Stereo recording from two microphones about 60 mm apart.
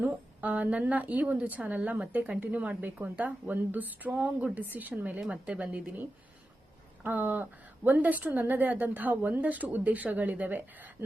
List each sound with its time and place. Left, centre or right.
0.0 s a woman's voice: right
7.0 s a woman's voice: right